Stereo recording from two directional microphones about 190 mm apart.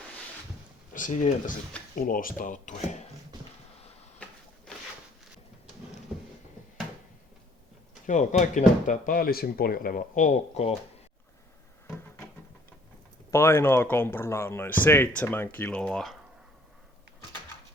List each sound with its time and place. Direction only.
0.9 s speech: 45° left (ahead or behind)
8.0 s speech: 40° left (ahead or behind)
11.9 s cupboard open or close: 10° left (ahead or behind)
13.3 s speech: 15° left (ahead or behind)